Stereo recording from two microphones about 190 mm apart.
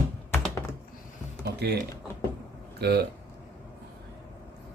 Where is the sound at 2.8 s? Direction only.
60° right (ahead or behind).